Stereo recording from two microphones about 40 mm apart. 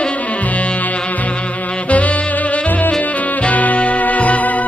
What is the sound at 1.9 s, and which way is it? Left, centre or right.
Saxophone, left.